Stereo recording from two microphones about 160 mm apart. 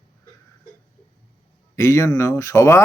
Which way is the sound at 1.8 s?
20° left (ahead or behind).